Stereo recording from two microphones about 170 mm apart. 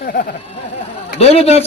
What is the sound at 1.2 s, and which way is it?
Speech, 40° left (ahead or behind).